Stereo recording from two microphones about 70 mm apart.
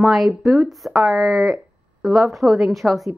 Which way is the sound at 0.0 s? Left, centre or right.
Centre.